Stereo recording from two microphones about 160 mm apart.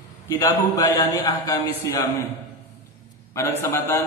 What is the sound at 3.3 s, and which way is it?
Mantra, 20° left (ahead or behind).